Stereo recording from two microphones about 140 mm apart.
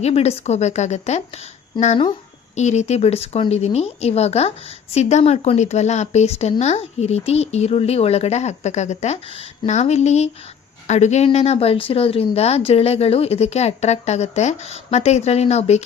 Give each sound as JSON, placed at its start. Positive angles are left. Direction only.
{"t": 0.0, "sound": "speech", "side_deg": 50}
{"t": 2.6, "sound": "speech", "side_deg": 55}